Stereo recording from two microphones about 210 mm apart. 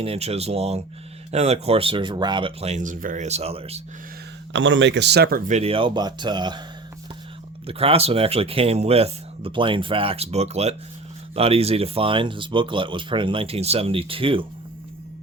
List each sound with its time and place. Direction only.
0.0 s speech: 30° right (ahead or behind)
4.5 s speech: 60° right (ahead or behind)
5.5 s speech: 30° right (ahead or behind)
7.7 s speech: 25° right (ahead or behind)